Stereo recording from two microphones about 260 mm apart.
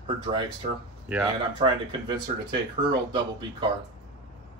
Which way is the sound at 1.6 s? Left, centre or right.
Centre.